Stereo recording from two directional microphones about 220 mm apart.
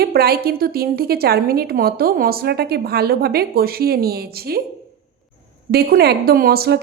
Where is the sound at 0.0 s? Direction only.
45° right (ahead or behind).